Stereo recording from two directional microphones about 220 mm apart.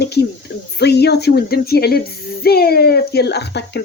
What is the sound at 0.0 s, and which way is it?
Speech, 50° left (ahead or behind).